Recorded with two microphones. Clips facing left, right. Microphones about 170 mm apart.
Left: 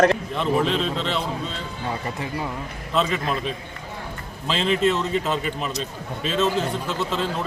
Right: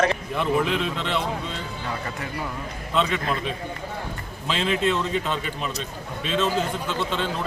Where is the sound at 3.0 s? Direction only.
Centre (ahead or behind).